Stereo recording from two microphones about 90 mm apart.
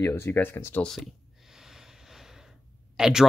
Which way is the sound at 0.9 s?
5° right (ahead or behind).